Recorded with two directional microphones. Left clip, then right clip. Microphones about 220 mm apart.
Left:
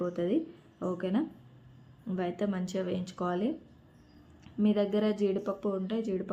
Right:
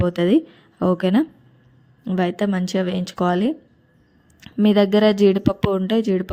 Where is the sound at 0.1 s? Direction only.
40° right (ahead or behind).